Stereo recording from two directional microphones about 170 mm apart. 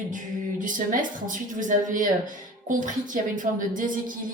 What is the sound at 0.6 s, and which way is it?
Speech, 50° right (ahead or behind).